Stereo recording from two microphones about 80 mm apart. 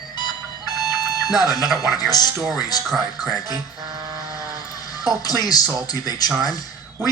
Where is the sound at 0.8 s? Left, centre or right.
Left.